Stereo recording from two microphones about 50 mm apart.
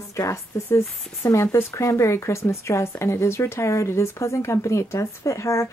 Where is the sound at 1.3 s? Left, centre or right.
Left.